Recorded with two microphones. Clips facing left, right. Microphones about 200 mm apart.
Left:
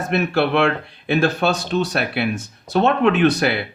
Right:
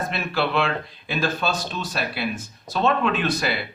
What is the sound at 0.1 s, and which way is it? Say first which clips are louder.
Speech: left 10 dB; 60° left (ahead or behind).